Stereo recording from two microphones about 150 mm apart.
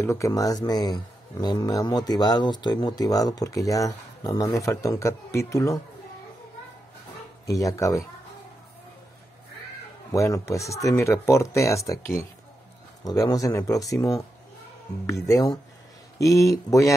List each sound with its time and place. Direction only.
0.0 s speech: 20° left (ahead or behind)
7.4 s speech: 20° left (ahead or behind)
10.1 s speech: 20° left (ahead or behind)
15.2 s speech: 20° left (ahead or behind)